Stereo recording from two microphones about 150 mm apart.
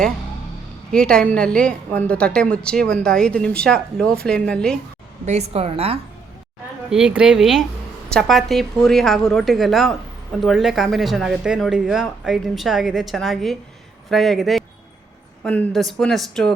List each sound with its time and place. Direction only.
0.9 s a woman's voice: 5° left (ahead or behind)
5.2 s a woman's voice: 45° right (ahead or behind)
6.9 s speech: 5° right (ahead or behind)